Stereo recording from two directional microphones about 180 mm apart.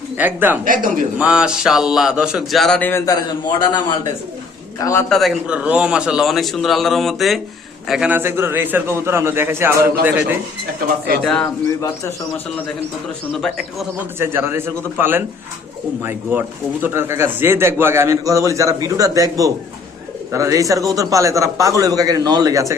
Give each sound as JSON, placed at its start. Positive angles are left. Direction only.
{"t": 0.2, "sound": "a man's voice", "side_deg": -10}
{"t": 3.6, "sound": "a man's voice", "side_deg": 25}
{"t": 5.0, "sound": "a man's voice", "side_deg": 0}
{"t": 11.2, "sound": "a man's voice", "side_deg": 5}
{"t": 11.4, "sound": "speech", "side_deg": 20}
{"t": 13.4, "sound": "a man's voice", "side_deg": 0}
{"t": 14.2, "sound": "a man's voice", "side_deg": -10}
{"t": 16.8, "sound": "a man's voice", "side_deg": -15}